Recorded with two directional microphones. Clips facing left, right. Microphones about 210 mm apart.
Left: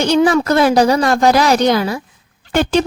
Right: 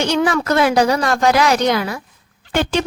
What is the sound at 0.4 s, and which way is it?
A woman's voice, 35° left (ahead or behind).